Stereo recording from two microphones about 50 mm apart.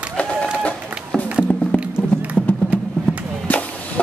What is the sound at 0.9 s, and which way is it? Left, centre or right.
Music, right.